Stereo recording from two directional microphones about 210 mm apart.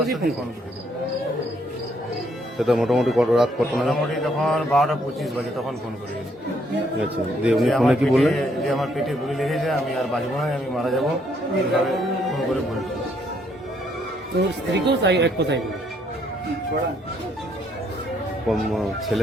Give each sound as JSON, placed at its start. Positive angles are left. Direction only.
{"t": 0.0, "sound": "a man's voice", "side_deg": 0}
{"t": 2.6, "sound": "a man's voice", "side_deg": 0}
{"t": 7.4, "sound": "a man's voice", "side_deg": 0}
{"t": 14.3, "sound": "speech", "side_deg": -55}
{"t": 18.4, "sound": "a man's voice", "side_deg": 0}